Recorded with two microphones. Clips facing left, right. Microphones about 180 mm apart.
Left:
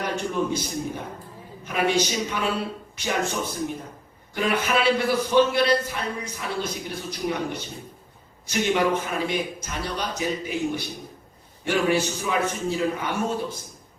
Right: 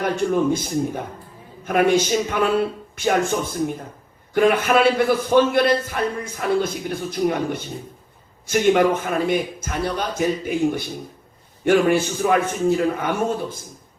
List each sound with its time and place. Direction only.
0.5 s a man's voice: 50° right (ahead or behind)